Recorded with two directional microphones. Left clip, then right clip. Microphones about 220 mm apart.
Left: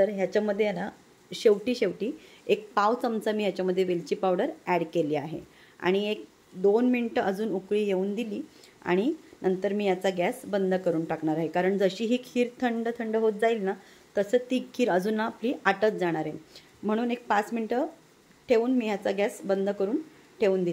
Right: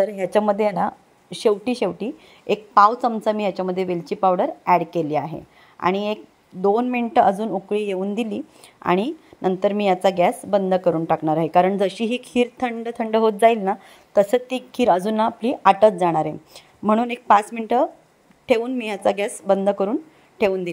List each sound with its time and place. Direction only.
0.0 s a woman's voice: 25° right (ahead or behind)